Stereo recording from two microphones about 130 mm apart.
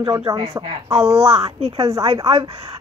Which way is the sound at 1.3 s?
55° right (ahead or behind).